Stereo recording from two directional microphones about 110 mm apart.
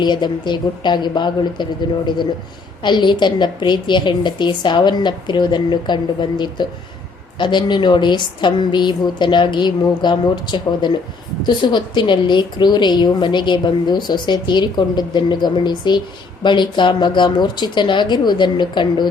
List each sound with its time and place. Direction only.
0.0 s a woman's voice: 45° left (ahead or behind)
2.8 s a woman's voice: 45° left (ahead or behind)